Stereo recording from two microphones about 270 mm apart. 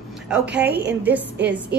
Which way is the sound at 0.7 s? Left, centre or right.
Right.